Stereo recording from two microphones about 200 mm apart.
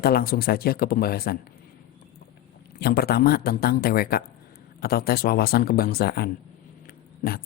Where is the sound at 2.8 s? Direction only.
50° left (ahead or behind).